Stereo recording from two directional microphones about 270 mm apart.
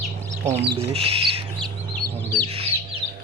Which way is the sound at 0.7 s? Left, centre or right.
Right.